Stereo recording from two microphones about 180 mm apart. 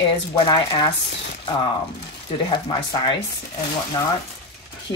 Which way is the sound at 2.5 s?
25° left (ahead or behind).